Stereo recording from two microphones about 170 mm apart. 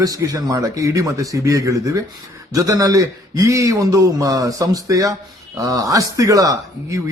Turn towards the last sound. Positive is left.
turn(degrees=-20)  # may be behind; listen again after turning